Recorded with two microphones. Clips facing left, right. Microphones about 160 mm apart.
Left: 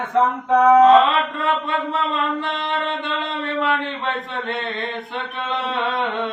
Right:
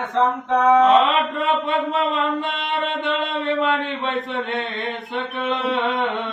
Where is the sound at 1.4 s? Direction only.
20° right (ahead or behind).